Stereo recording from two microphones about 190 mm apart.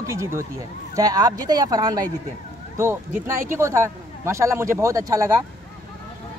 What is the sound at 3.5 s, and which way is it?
A man's voice, 15° right (ahead or behind).